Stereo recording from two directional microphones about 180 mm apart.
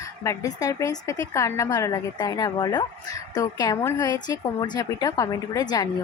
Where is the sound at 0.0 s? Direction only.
15° left (ahead or behind).